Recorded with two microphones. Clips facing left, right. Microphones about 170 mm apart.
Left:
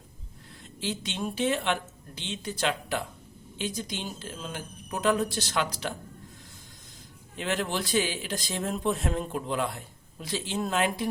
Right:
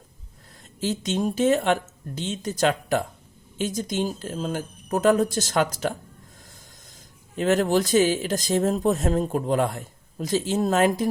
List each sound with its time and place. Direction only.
0.8 s speech: 45° right (ahead or behind)
7.3 s speech: 45° right (ahead or behind)